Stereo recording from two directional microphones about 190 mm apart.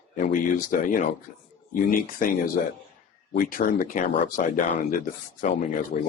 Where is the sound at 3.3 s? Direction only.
50° left (ahead or behind).